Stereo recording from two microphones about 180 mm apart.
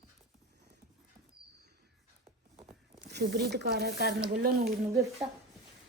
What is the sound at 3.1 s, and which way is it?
Speech, 65° right (ahead or behind).